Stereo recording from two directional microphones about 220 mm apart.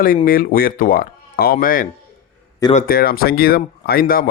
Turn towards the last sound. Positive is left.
turn(degrees=40)  # may be behind; listen again after turning